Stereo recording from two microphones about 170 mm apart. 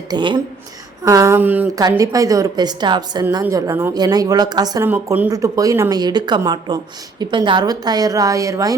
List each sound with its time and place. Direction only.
0.1 s speech: 25° right (ahead or behind)
1.7 s speech: 20° right (ahead or behind)
3.4 s speech: 15° right (ahead or behind)
4.9 s speech: 10° right (ahead or behind)